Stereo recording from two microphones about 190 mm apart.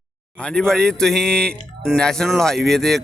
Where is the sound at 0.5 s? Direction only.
5° left (ahead or behind).